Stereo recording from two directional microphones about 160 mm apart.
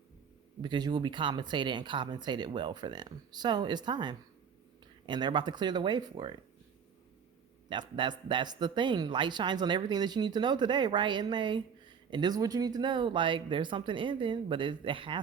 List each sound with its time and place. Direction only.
0.6 s speech: 25° right (ahead or behind)
7.7 s speech: 30° right (ahead or behind)